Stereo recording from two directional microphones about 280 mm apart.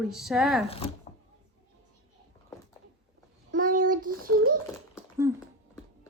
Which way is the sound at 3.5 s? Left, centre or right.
Right.